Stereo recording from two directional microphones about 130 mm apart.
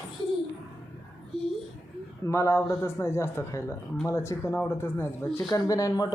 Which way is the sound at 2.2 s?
20° left (ahead or behind).